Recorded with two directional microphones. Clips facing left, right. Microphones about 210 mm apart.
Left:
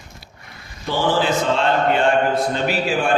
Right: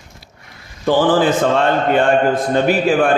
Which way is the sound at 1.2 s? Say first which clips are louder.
Right 5 dB; 50° right (ahead or behind).